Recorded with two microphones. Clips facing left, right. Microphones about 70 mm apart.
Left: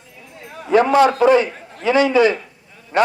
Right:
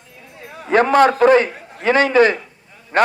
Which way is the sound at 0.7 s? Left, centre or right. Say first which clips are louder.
Even; right.